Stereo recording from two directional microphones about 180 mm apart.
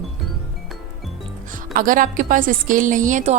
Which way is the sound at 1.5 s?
50° right (ahead or behind).